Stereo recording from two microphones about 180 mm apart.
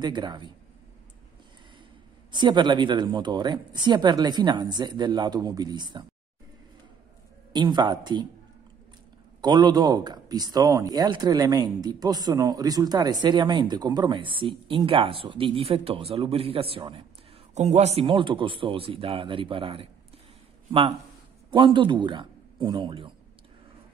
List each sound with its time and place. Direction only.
0.0 s speech: 25° right (ahead or behind)
2.3 s speech: 25° right (ahead or behind)
7.5 s speech: 25° right (ahead or behind)
9.4 s speech: 25° right (ahead or behind)
21.5 s speech: 25° right (ahead or behind)